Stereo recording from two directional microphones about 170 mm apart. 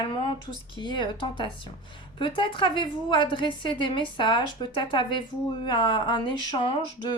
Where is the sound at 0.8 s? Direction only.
25° left (ahead or behind).